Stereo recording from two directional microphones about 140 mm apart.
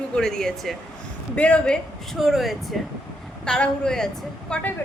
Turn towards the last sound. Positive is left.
turn(degrees=5)  # may be behind; listen again after turning